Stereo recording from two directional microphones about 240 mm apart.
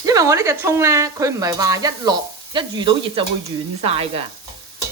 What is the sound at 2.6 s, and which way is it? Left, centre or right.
Stir, centre.